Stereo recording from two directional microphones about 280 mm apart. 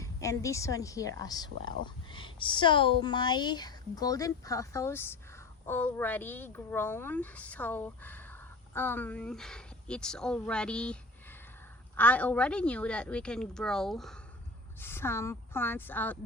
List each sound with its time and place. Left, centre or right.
0.0 s speech: centre
11.9 s a woman's voice: centre